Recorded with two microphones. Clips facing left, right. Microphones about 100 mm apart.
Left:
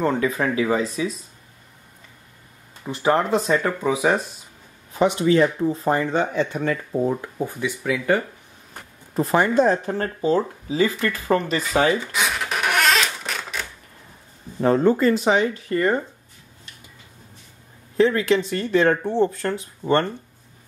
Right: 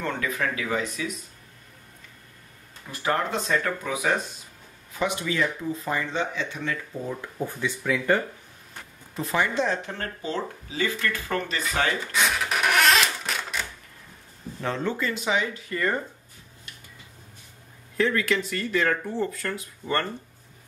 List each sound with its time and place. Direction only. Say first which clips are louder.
0.0 s speech: left 7 dB; 30° left (ahead or behind)
2.9 s speech: left 7 dB; 25° left (ahead or behind)
4.9 s speech: left 9 dB; 30° left (ahead or behind)
5.9 s speech: left 7 dB; 45° left (ahead or behind)
7.3 s speech: left 3 dB; 10° left (ahead or behind)
9.1 s speech: left 7 dB; 45° left (ahead or behind)
12.4 s a sound: left 1 dB; centre (ahead or behind)
14.6 s speech: left 11 dB; 40° left (ahead or behind)
17.9 s speech: left 6 dB; 25° left (ahead or behind)